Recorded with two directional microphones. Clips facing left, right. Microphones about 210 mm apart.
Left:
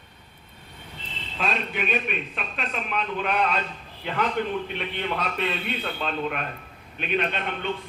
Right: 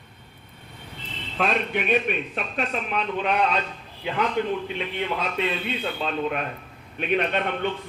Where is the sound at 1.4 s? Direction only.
55° right (ahead or behind).